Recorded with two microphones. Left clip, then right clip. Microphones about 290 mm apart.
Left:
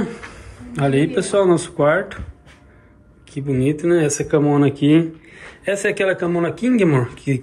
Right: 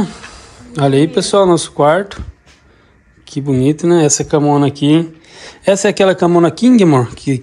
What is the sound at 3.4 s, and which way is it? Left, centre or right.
Speech, centre.